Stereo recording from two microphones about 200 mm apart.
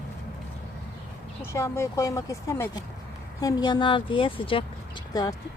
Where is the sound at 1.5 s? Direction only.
15° left (ahead or behind).